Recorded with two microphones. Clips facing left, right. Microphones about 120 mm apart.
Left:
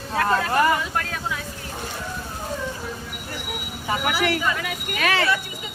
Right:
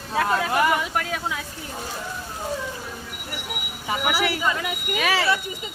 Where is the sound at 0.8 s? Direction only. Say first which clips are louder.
Right 1 dB; 15° right (ahead or behind).